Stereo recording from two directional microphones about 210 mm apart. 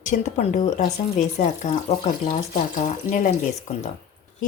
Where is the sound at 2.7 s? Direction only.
40° left (ahead or behind).